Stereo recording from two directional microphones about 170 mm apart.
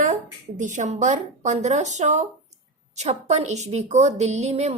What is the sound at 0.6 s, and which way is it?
A woman's voice, 45° right (ahead or behind).